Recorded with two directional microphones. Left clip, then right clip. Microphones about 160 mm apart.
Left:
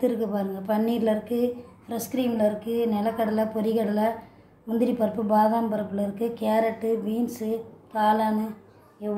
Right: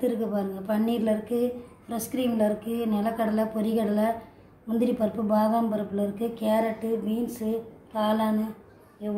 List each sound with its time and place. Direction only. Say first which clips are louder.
0.0 s a woman's voice: left 2 dB; 25° left (ahead or behind)